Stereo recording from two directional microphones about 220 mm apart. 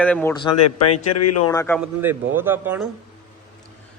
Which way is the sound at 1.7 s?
10° right (ahead or behind).